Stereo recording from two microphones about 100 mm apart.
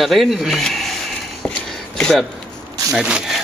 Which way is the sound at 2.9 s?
5° right (ahead or behind).